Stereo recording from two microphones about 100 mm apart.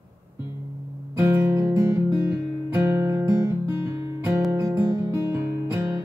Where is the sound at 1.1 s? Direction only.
30° right (ahead or behind).